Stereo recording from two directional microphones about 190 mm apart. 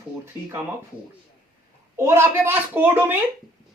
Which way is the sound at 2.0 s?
15° right (ahead or behind).